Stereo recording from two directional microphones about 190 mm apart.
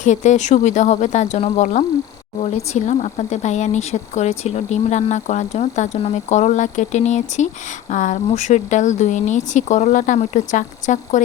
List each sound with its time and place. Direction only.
0.0 s speech: 40° left (ahead or behind)